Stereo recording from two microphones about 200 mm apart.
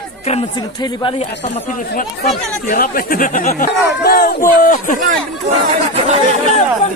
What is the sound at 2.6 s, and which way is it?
Speech, 45° left (ahead or behind).